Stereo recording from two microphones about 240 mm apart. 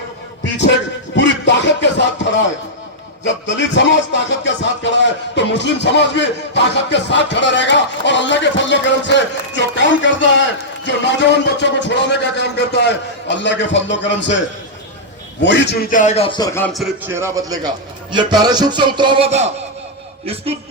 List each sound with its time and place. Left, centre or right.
1.1 s music: left
15.4 s a man's voice: left
16.5 s speech: centre
18.1 s music: centre